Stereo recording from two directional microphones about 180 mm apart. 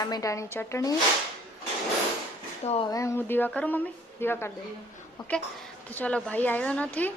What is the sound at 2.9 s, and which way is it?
Speech, 15° left (ahead or behind).